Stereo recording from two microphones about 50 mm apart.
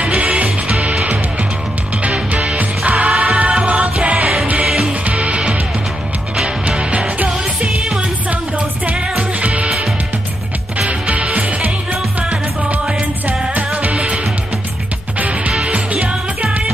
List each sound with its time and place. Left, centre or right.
0.0 s music: right
2.0 s music: right
4.6 s music: centre
5.0 s music: right
10.9 s music: right